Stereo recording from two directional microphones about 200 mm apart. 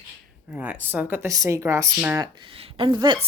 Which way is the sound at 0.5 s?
5° right (ahead or behind).